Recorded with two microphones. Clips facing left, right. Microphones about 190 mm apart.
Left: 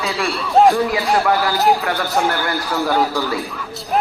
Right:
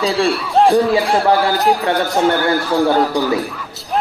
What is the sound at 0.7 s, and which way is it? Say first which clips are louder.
A man's voice: right 3 dB; 30° right (ahead or behind).